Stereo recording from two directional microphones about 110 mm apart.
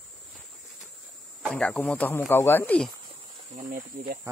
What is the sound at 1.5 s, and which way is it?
Speech, 10° left (ahead or behind).